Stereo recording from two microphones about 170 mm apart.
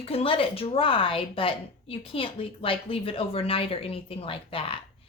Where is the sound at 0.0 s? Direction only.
35° left (ahead or behind).